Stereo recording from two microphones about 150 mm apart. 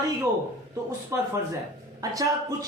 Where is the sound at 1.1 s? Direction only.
20° right (ahead or behind).